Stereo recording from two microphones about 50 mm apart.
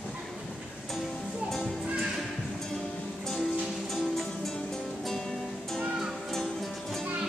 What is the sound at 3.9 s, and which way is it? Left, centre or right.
Music, centre.